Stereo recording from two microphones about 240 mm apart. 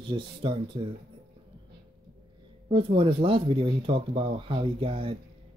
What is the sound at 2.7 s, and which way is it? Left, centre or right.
Speech, right.